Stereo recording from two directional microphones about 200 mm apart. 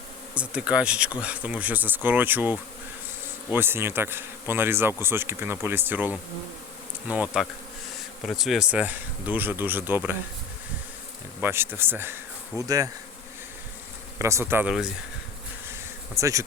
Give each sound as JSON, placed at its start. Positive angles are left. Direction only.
{"t": 0.3, "sound": "speech", "side_deg": -5}
{"t": 11.3, "sound": "speech", "side_deg": -10}
{"t": 14.2, "sound": "speech", "side_deg": -15}
{"t": 16.1, "sound": "speech", "side_deg": -15}